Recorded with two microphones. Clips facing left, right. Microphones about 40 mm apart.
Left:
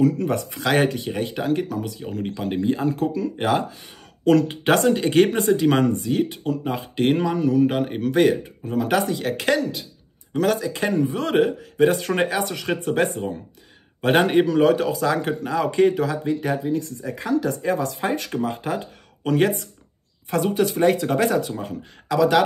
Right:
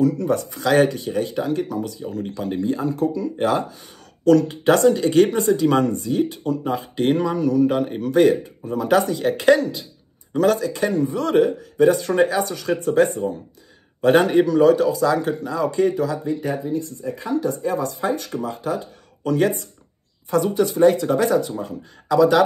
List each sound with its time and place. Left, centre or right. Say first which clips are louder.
0.0 s speech: right 1 dB; left
10.6 s a man's voice: right 1 dB; left
22.0 s speech: right 2 dB; left